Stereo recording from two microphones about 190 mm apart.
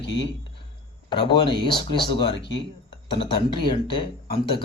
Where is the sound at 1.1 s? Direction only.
25° left (ahead or behind).